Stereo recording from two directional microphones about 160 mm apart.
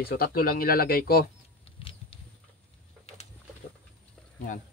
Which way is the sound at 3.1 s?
40° left (ahead or behind).